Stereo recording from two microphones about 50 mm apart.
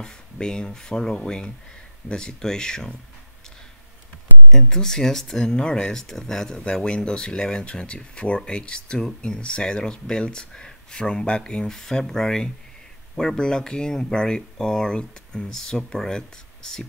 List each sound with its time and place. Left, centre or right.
0.0 s speech: centre
4.5 s speech: centre